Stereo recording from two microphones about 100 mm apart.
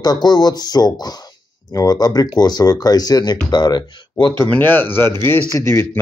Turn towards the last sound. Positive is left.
turn(degrees=30)  # may be behind; listen again after turning